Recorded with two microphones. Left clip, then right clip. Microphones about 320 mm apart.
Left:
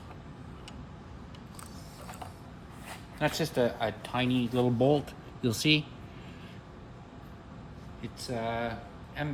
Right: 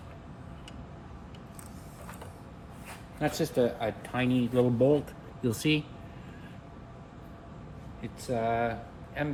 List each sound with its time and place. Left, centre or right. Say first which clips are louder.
3.2 s speech: right 1 dB; centre
8.0 s speech: right 4 dB; centre